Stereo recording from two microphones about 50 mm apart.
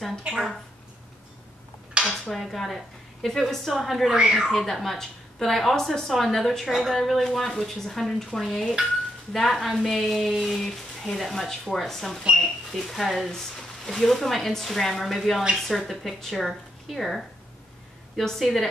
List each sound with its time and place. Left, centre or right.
2.0 s dishes: centre
2.3 s a woman's voice: centre
4.1 s speech: centre
4.5 s a woman's voice: centre
6.7 s speech: centre
7.0 s a woman's voice: centre